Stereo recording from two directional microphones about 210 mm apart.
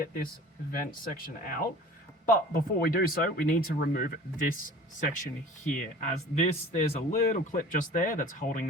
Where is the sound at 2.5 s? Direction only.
45° left (ahead or behind).